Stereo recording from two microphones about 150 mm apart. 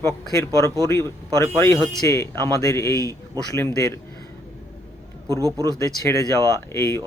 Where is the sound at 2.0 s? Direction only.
20° left (ahead or behind).